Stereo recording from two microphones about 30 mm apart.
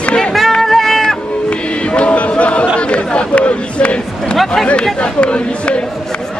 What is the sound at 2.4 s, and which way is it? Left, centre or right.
Chatter, left.